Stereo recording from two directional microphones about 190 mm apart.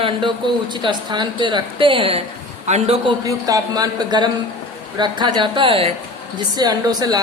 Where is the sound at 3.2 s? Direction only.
20° right (ahead or behind).